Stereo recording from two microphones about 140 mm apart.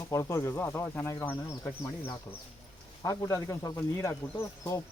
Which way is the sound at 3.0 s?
25° left (ahead or behind).